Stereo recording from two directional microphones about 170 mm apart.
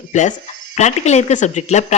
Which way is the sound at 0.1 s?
45° left (ahead or behind).